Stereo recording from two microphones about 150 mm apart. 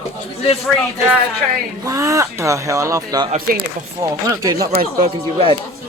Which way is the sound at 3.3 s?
80° right.